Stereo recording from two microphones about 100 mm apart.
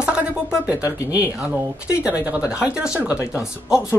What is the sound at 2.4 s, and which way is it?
Speech, 25° left (ahead or behind).